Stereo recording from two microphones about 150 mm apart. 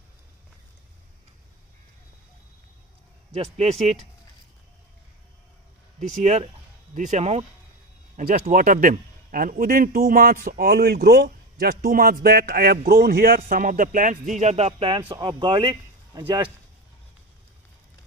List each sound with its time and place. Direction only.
3.5 s speech: 45° right (ahead or behind)
6.2 s speech: 45° right (ahead or behind)
8.2 s a man's voice: 65° right (ahead or behind); by 16.4 s 30° right (ahead or behind)